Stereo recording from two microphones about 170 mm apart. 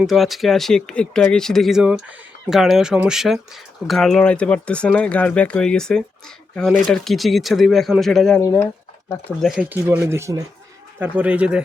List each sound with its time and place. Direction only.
0.0 s speech: centre (ahead or behind)
8.4 s speech: 15° left (ahead or behind)
9.4 s speech: 5° right (ahead or behind)